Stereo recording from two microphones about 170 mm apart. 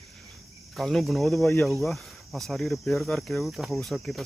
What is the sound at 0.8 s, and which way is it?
Speech, centre (ahead or behind).